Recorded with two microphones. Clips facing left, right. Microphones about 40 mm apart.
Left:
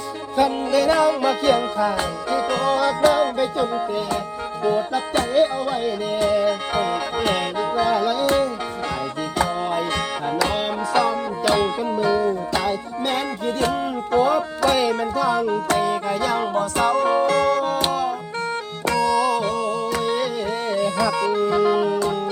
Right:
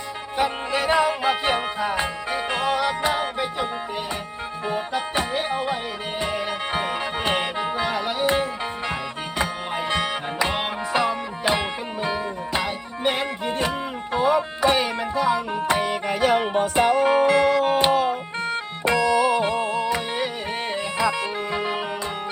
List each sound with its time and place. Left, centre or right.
0.3 s music: right